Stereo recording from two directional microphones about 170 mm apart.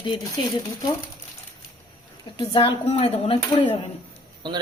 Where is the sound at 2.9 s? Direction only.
35° left (ahead or behind).